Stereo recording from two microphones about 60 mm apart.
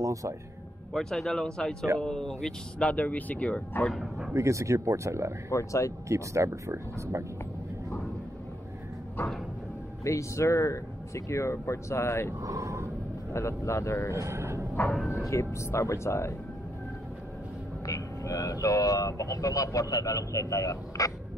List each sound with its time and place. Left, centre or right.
0.0 s speech: right
0.9 s speech: centre
2.9 s speech: left
4.3 s speech: right
5.5 s speech: left
6.0 s speech: right
10.0 s speech: left
12.4 s speech: right
13.3 s speech: left
14.1 s a sound: right
15.2 s speech: left
17.8 s speech: left